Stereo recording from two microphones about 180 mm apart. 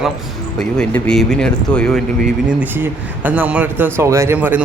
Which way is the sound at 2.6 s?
10° right (ahead or behind).